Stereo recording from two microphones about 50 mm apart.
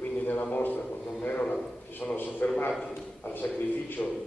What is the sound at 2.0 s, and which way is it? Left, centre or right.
A man's voice, left.